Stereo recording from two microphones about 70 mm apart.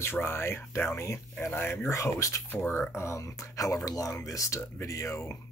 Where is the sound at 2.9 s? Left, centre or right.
Left.